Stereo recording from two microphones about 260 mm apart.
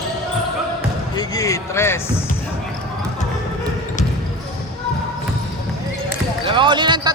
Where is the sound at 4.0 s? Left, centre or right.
Left.